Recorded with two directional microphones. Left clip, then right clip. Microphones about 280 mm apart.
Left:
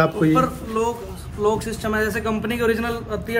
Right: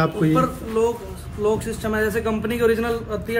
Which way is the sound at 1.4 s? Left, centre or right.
Centre.